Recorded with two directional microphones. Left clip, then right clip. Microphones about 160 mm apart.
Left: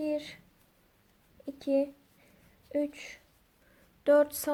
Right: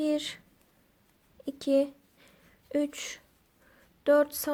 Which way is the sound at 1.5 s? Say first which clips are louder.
Right 3 dB; 40° right (ahead or behind).